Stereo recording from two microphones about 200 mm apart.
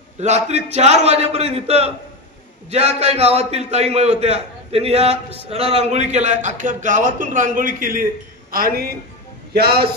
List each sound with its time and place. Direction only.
0.2 s a man's voice: 35° right (ahead or behind); by 9.8 s 50° right (ahead or behind)